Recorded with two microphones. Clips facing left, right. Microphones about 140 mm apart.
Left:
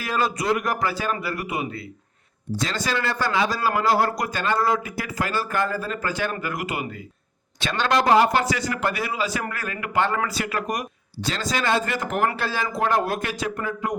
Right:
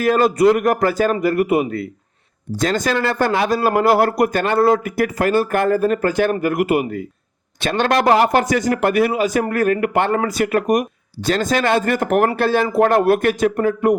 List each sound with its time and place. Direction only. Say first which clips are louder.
0.0 s speech: right 11 dB; 50° right (ahead or behind)